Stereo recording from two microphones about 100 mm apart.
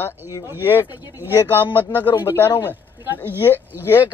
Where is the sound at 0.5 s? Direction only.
20° right (ahead or behind).